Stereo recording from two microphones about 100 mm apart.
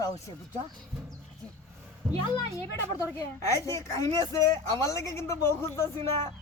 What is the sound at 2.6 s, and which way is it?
A woman's voice, 30° left (ahead or behind).